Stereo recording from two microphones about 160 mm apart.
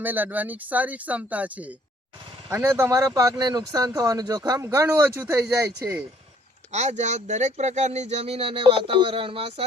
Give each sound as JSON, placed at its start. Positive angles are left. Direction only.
{"t": 0.0, "sound": "speech", "side_deg": -10}
{"t": 6.7, "sound": "speech", "side_deg": -45}